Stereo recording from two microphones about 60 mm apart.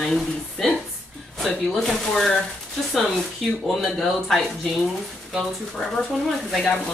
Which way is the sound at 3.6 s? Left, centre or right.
Centre.